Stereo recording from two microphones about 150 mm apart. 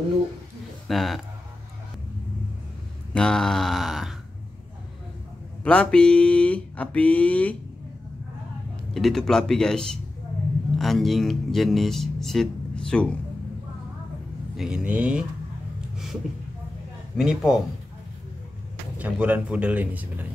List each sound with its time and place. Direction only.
0.8 s speech: centre (ahead or behind)
3.1 s speech: 5° left (ahead or behind)
5.6 s speech: 10° left (ahead or behind)
8.9 s speech: centre (ahead or behind)
14.6 s speech: 5° right (ahead or behind)
17.2 s speech: 5° right (ahead or behind)
18.9 s speech: 10° right (ahead or behind)